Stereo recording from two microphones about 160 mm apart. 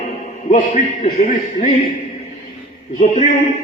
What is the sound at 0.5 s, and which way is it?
Speech, 50° left (ahead or behind).